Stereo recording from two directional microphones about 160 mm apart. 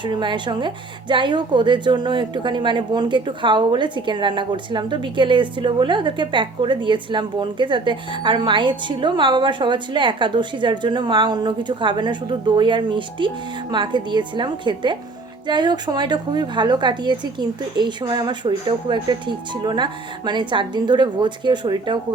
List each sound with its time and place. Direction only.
0.0 s a woman's voice: 30° right (ahead or behind)